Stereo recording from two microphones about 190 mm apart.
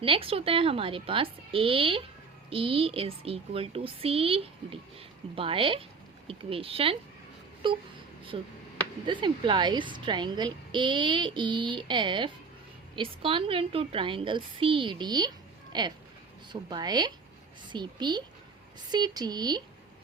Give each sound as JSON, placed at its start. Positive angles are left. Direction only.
{"t": 0.0, "sound": "speech", "side_deg": -30}